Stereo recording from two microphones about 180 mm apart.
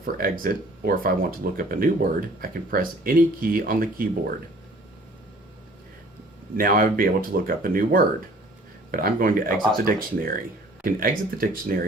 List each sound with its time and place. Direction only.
0.0 s speech: 50° right (ahead or behind)
6.6 s speech: 55° right (ahead or behind)